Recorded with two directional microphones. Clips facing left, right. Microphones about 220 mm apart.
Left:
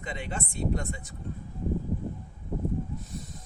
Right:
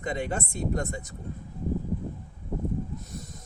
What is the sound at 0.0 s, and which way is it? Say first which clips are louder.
Speech: right 5 dB; 45° right (ahead or behind).